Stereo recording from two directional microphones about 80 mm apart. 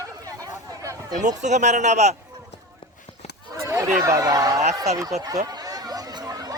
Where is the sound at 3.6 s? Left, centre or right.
Right.